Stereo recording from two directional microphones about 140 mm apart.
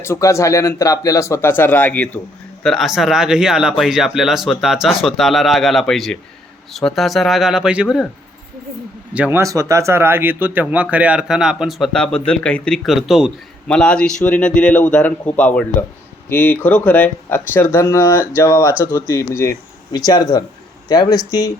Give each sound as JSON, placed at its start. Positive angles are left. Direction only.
{"t": 0.0, "sound": "speech", "side_deg": 20}
{"t": 2.6, "sound": "speech", "side_deg": 0}
{"t": 9.1, "sound": "speech", "side_deg": -10}
{"t": 9.4, "sound": "a man's voice", "side_deg": -25}